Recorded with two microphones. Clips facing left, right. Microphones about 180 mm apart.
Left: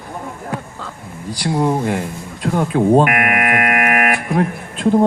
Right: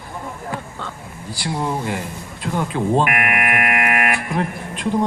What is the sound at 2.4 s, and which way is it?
Speech, 50° left (ahead or behind).